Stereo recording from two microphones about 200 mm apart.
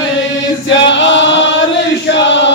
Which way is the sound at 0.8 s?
65° left (ahead or behind).